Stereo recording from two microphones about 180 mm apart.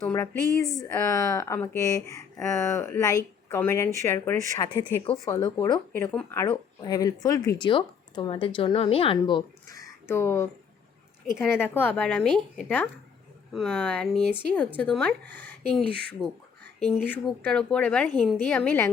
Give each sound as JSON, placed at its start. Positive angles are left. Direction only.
{"t": 0.0, "sound": "speech", "side_deg": 15}
{"t": 5.9, "sound": "speech", "side_deg": 10}